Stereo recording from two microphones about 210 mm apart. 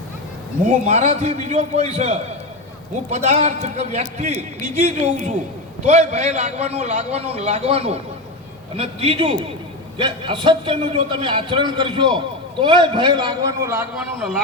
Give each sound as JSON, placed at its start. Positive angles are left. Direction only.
{"t": 0.9, "sound": "a man's voice", "side_deg": -35}